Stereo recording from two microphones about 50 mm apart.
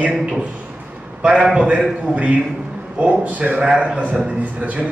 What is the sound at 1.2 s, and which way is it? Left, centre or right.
A man's voice, centre.